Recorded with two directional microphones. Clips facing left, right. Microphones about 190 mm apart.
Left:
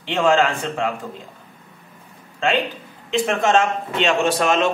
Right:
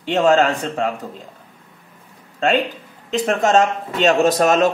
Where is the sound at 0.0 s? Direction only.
40° right (ahead or behind).